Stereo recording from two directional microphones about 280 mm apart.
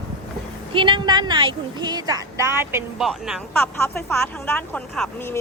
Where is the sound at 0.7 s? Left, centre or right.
Centre.